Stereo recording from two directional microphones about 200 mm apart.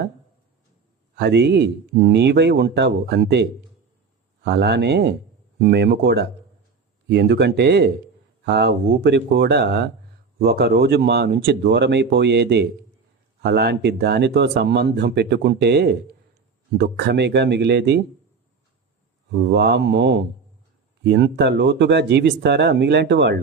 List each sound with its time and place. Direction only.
1.1 s speech: 55° right (ahead or behind)
4.4 s speech: 55° right (ahead or behind)
19.3 s speech: 60° right (ahead or behind)